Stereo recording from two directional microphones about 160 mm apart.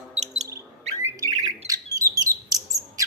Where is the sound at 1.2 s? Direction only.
20° right (ahead or behind).